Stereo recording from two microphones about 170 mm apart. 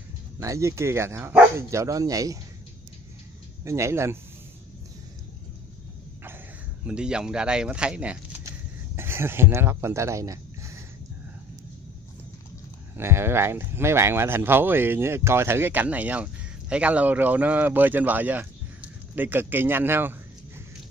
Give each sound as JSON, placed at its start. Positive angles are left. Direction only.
{"t": 0.4, "sound": "speech", "side_deg": -20}
{"t": 3.6, "sound": "speech", "side_deg": -15}
{"t": 6.9, "sound": "speech", "side_deg": -5}
{"t": 12.9, "sound": "speech", "side_deg": -15}